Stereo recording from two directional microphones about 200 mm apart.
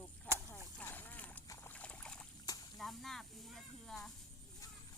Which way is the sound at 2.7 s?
Centre (ahead or behind).